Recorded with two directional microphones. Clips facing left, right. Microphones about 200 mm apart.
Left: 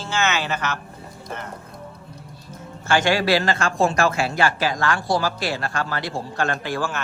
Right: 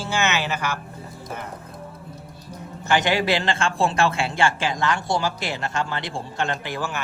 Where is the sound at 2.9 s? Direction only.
20° right (ahead or behind).